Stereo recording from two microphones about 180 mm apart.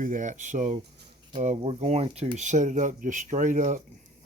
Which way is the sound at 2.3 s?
40° right (ahead or behind).